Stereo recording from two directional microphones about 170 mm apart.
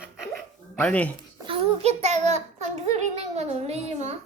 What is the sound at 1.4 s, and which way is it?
Child singing, 35° right (ahead or behind).